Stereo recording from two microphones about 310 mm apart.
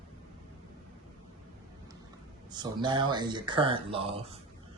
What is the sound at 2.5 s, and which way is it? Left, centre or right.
Speech, centre.